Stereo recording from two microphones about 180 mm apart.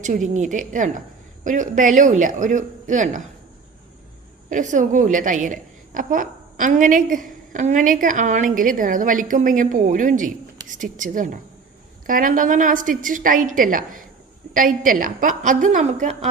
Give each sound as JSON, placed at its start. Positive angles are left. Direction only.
{"t": 0.0, "sound": "a woman's voice", "side_deg": -45}
{"t": 4.4, "sound": "a woman's voice", "side_deg": -45}